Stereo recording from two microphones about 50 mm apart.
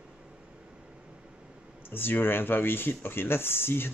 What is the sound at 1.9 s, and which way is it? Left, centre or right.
Speech, left.